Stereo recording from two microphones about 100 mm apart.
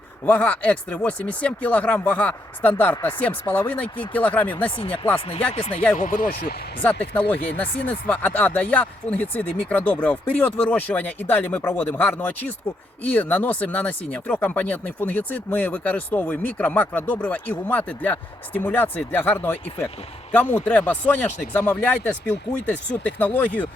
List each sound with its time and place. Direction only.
0.3 s speech: 15° left (ahead or behind)
6.8 s speech: 15° left (ahead or behind)